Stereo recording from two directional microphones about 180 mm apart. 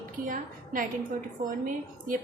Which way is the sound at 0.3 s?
50° right (ahead or behind).